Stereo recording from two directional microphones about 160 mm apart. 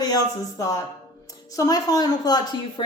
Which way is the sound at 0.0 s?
25° left (ahead or behind).